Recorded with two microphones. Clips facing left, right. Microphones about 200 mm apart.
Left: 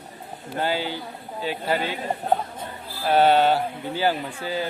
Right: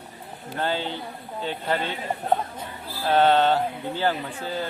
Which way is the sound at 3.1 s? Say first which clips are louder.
Left 1 dB; 10° left (ahead or behind).